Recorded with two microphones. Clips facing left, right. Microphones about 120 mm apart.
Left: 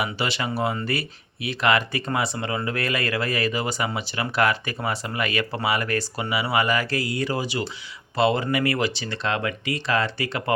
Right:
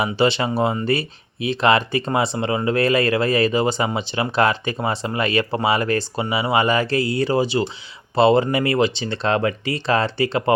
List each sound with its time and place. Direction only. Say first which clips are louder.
0.0 s speech: right 8 dB; 30° right (ahead or behind)